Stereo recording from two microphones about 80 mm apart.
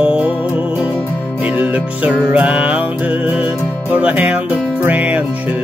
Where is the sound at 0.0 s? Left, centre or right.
Centre.